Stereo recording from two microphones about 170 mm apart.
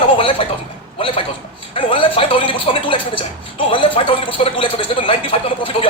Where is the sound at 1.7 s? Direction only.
30° left (ahead or behind).